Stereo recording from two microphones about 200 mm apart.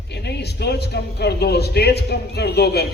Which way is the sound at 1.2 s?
55° left (ahead or behind).